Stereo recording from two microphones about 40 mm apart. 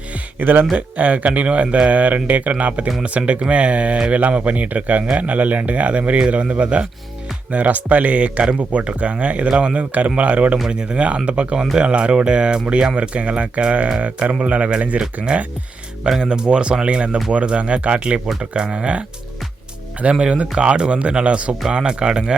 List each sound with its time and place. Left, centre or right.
0.3 s speech: right
0.8 s speech: right
14.0 s speech: right